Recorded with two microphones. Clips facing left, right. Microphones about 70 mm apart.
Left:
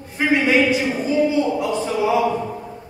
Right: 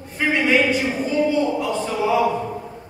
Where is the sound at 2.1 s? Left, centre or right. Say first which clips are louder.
Right 1 dB; centre.